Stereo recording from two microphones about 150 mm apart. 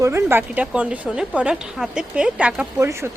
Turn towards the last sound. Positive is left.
turn(degrees=-15)  # may be behind; listen again after turning